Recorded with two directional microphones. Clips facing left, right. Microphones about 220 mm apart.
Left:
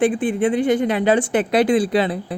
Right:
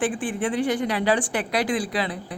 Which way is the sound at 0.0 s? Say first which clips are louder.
Left 7 dB; 20° left (ahead or behind).